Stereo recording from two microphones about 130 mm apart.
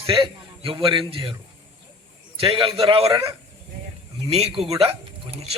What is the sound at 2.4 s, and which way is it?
Speech, 45° right (ahead or behind).